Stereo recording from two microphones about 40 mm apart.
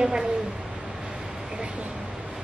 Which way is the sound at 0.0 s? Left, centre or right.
Centre.